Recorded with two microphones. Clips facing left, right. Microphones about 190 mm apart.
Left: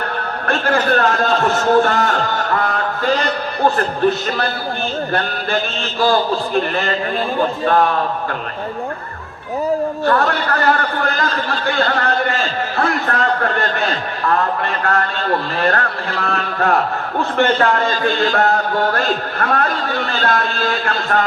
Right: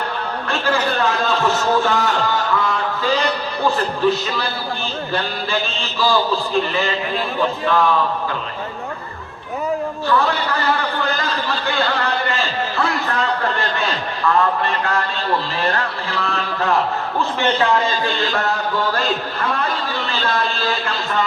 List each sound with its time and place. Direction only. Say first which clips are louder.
0.4 s a man's voice: left 4 dB; 60° left (ahead or behind)
10.1 s a man's voice: left 1 dB; 55° left (ahead or behind)